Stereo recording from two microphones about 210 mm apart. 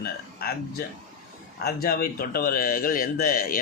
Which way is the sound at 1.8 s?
45° left (ahead or behind).